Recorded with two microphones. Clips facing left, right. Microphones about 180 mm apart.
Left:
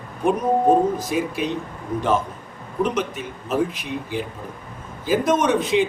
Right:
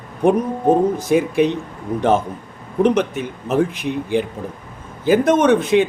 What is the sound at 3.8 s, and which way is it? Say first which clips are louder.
Speech: right 7 dB; 50° right (ahead or behind).